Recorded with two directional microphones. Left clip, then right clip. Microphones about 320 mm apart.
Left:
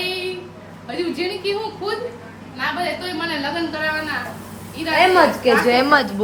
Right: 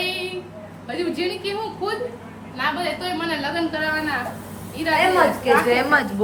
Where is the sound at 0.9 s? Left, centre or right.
Centre.